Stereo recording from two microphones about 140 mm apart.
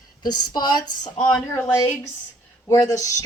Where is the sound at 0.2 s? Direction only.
30° left (ahead or behind).